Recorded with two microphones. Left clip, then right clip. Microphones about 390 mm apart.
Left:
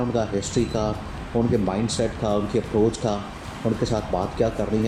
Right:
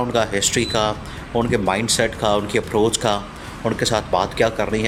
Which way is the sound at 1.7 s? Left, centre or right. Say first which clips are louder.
Right 6 dB; right.